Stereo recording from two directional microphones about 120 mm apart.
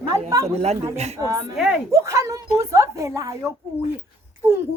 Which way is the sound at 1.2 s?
30° right (ahead or behind).